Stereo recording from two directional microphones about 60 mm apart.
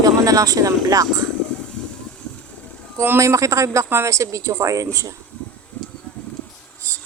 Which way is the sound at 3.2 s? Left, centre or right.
Right.